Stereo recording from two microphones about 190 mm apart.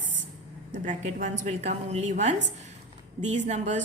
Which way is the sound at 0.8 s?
40° right (ahead or behind).